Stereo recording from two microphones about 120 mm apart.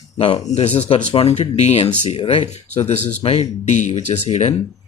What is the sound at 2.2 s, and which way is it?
Speech, 45° left (ahead or behind).